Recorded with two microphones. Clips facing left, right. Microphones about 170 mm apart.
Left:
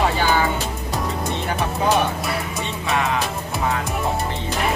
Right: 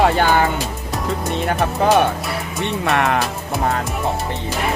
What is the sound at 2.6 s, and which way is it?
Music, 65° right (ahead or behind).